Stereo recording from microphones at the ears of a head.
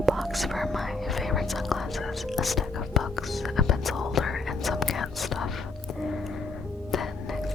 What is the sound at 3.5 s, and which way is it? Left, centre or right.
Whispering, left.